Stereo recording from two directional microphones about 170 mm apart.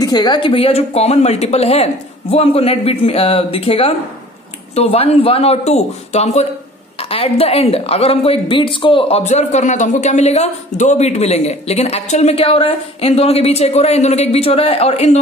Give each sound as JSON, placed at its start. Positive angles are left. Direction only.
{"t": 0.0, "sound": "speech", "side_deg": 25}